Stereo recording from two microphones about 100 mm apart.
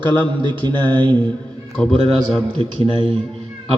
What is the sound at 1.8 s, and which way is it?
Speech, 10° left (ahead or behind).